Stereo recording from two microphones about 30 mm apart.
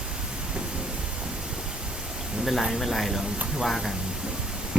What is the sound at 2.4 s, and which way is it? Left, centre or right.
Speech, centre.